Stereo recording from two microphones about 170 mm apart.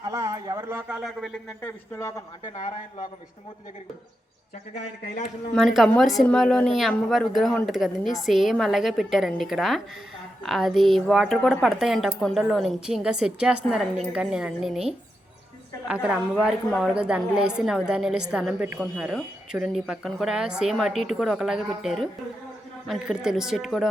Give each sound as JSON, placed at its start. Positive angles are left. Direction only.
{"t": 0.0, "sound": "a man's voice", "side_deg": -20}
{"t": 2.6, "sound": "a man's voice", "side_deg": 45}
{"t": 5.5, "sound": "speech", "side_deg": 0}
{"t": 15.9, "sound": "a woman's voice", "side_deg": -5}